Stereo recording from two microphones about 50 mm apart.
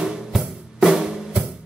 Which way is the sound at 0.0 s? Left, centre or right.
Centre.